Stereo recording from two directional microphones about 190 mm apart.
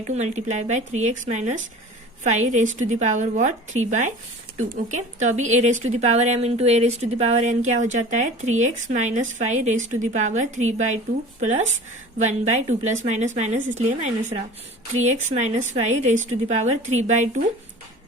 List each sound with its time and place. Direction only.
0.1 s a woman's voice: 40° right (ahead or behind)
15.3 s a woman's voice: 35° right (ahead or behind)